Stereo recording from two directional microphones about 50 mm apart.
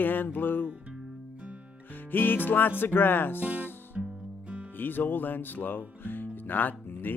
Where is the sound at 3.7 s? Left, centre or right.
Left.